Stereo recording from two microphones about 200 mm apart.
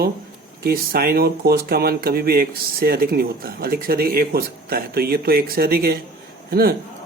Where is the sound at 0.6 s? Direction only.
50° right (ahead or behind).